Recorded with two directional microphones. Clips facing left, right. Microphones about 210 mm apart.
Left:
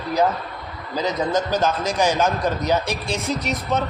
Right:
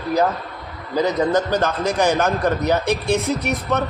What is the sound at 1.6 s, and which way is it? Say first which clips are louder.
A man's voice: right 1 dB; 60° right (ahead or behind).